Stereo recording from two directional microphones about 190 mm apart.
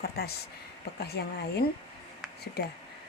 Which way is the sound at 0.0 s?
55° left (ahead or behind).